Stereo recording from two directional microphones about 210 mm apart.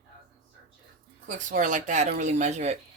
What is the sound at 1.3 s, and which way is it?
Speech, 40° right (ahead or behind).